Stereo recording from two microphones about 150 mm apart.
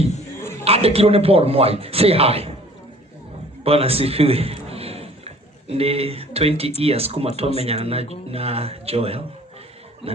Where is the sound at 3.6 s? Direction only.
40° right (ahead or behind).